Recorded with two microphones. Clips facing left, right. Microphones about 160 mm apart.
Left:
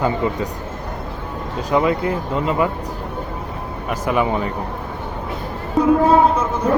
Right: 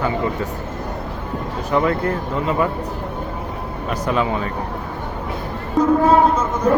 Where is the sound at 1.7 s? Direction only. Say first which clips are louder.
Left 1 dB; 15° left (ahead or behind).